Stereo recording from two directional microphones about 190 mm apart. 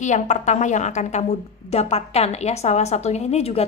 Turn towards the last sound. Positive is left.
turn(degrees=35)  # may be behind; listen again after turning